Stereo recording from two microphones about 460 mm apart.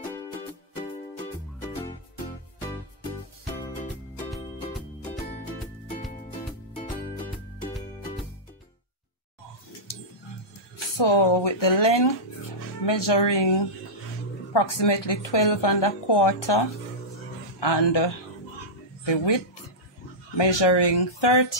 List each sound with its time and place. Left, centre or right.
1.6 s music: centre
11.0 s a woman's voice: left